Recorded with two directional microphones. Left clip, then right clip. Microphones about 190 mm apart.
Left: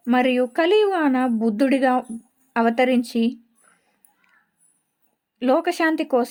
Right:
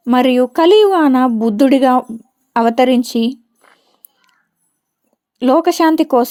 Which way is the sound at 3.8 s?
30° right (ahead or behind).